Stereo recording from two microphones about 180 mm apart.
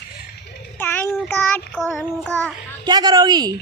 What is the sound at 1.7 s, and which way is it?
Speech, centre (ahead or behind).